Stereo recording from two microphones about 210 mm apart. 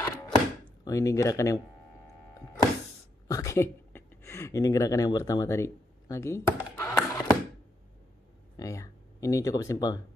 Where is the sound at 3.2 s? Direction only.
15° left (ahead or behind).